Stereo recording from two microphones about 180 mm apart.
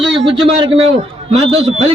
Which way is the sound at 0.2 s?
30° right (ahead or behind).